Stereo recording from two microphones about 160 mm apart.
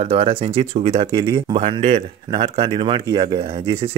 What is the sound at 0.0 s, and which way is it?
Speech, 40° right (ahead or behind).